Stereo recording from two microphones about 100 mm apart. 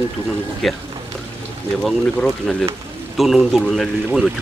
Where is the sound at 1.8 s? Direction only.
5° left (ahead or behind).